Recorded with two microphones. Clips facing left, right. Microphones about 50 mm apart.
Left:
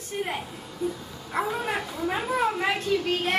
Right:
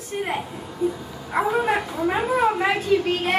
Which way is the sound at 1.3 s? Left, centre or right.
Centre.